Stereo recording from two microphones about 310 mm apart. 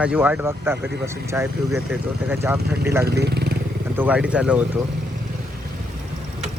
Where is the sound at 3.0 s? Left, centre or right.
Right.